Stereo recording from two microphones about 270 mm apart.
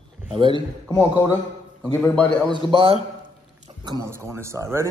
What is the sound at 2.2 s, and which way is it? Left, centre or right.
Speech, centre.